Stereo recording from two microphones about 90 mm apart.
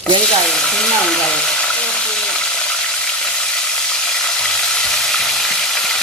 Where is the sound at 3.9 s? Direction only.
5° left (ahead or behind).